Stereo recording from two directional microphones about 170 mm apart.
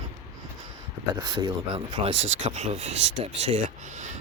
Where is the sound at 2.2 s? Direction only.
40° right (ahead or behind).